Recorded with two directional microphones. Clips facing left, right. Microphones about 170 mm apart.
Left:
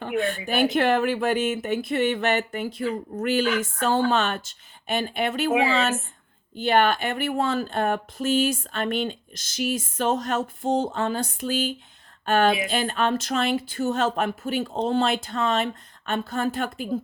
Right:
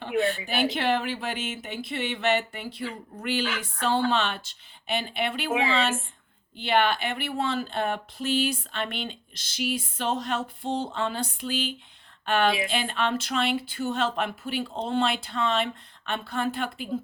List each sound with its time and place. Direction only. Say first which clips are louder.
0.0 s speech: even; 50° left (ahead or behind)